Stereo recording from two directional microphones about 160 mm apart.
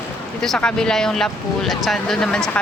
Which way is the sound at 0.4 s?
5° left (ahead or behind).